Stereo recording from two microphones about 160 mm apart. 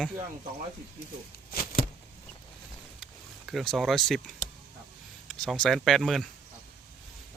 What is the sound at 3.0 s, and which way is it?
Vehicle, centre (ahead or behind).